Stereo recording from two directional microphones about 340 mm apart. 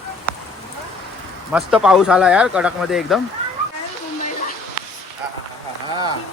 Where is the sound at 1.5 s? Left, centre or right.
Centre.